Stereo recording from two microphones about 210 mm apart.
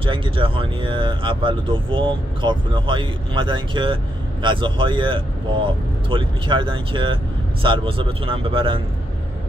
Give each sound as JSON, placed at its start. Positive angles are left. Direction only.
{"t": 0.0, "sound": "speech", "side_deg": -25}